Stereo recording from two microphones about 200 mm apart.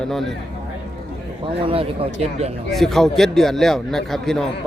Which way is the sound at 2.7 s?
Centre (ahead or behind).